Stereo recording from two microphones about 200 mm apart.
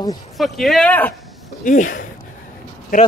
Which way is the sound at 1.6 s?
40° left (ahead or behind).